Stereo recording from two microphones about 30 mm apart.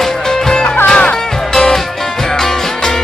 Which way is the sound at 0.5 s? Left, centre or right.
Left.